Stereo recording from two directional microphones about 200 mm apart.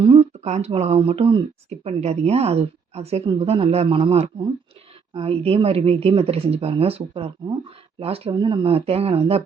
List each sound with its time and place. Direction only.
0.0 s speech: 30° right (ahead or behind)